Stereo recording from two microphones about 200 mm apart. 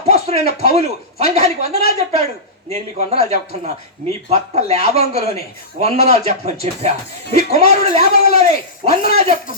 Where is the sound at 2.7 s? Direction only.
30° right (ahead or behind).